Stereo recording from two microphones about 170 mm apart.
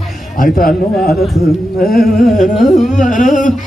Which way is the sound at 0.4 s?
55° left (ahead or behind).